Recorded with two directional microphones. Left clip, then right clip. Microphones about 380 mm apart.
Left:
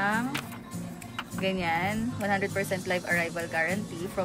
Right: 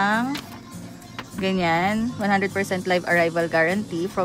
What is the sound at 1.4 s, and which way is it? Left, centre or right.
Speech, right.